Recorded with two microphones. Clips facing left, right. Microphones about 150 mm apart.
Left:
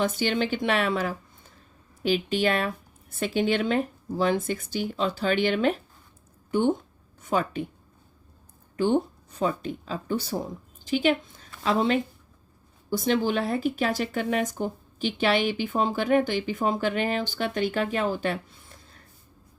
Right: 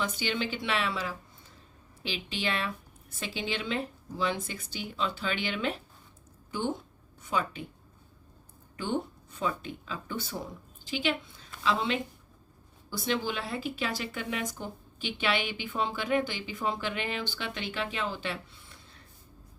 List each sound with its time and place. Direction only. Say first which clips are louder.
0.0 s a woman's voice: left 7 dB; 45° left (ahead or behind)
8.7 s a woman's voice: left 9 dB; 45° left (ahead or behind)